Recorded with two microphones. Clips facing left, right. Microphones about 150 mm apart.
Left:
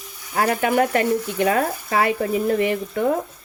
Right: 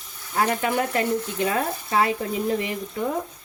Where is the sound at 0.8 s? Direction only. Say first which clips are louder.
Left 4 dB; 65° left (ahead or behind).